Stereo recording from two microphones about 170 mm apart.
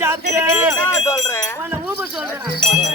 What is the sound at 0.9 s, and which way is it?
Speech, 15° left (ahead or behind).